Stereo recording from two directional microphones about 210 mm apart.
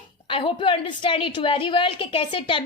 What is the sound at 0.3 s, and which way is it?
A woman's voice, 25° left (ahead or behind).